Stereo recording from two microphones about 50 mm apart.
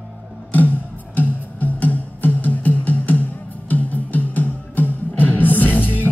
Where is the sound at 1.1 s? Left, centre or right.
Left.